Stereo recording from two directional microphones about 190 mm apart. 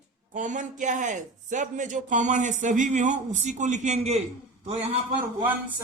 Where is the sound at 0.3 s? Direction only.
40° right (ahead or behind).